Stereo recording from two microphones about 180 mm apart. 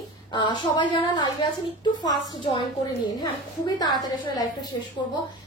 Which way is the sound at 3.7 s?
20° left (ahead or behind).